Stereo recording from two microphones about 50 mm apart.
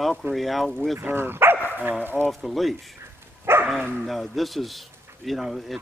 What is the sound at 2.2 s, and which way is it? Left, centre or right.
Speech, centre.